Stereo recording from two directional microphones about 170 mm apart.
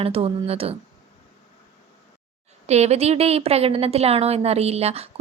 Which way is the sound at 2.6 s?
40° right (ahead or behind).